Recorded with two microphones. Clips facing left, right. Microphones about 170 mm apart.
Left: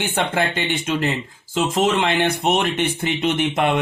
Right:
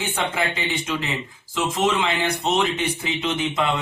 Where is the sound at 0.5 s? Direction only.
70° left (ahead or behind).